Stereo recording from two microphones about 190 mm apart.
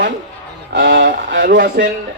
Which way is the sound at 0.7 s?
65° right (ahead or behind).